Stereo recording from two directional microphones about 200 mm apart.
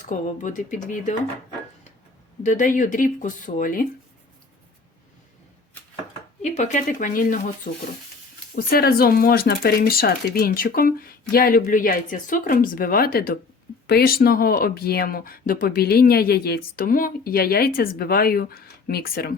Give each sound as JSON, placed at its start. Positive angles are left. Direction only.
{"t": 0.0, "sound": "speech", "side_deg": 40}
{"t": 2.4, "sound": "speech", "side_deg": 40}
{"t": 6.4, "sound": "speech", "side_deg": 35}